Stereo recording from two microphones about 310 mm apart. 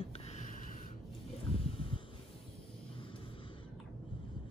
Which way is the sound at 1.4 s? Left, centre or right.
Centre.